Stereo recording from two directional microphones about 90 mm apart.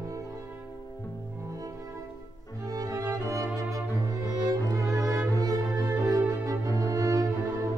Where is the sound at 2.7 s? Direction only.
40° right (ahead or behind).